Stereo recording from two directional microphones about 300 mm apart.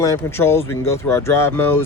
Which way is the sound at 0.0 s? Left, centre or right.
Centre.